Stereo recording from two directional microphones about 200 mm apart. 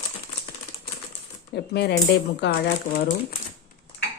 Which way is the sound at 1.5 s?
55° left (ahead or behind).